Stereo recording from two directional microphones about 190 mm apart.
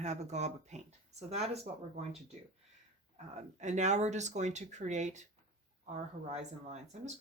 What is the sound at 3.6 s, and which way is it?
Speech, 40° right (ahead or behind).